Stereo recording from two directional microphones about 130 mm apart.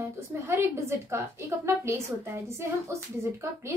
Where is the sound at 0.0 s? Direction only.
20° right (ahead or behind).